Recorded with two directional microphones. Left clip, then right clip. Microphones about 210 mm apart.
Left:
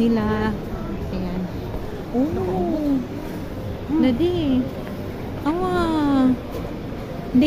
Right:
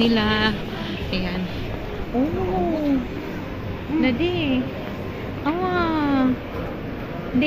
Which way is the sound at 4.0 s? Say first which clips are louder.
Left 2 dB; 30° left (ahead or behind).